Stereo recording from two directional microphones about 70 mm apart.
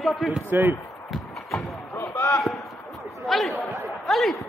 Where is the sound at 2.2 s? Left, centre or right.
Left.